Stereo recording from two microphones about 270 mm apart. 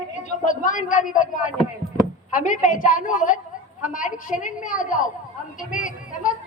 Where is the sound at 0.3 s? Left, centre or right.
Left.